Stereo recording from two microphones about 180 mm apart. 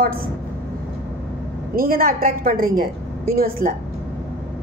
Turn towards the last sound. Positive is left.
turn(degrees=-55)  # may be behind; listen again after turning